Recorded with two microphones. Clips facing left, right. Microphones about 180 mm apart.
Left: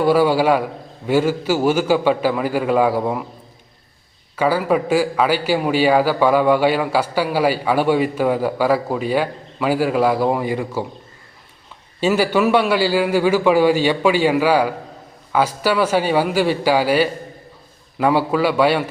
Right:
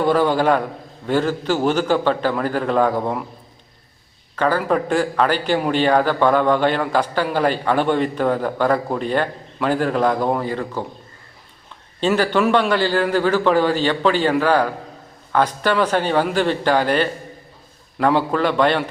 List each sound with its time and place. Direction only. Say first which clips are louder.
0.0 s a man's voice: left 2 dB; 10° left (ahead or behind)
4.4 s a man's voice: left 1 dB; 10° left (ahead or behind)
11.9 s a man's voice: left 1 dB; 10° left (ahead or behind)